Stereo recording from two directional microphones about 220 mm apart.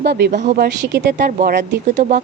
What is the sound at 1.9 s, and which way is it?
Speech, 35° right (ahead or behind).